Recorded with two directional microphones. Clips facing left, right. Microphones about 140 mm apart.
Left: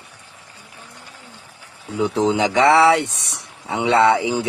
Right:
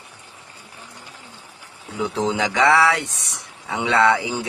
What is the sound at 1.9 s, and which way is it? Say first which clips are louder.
Speech: left 4 dB; 20° left (ahead or behind).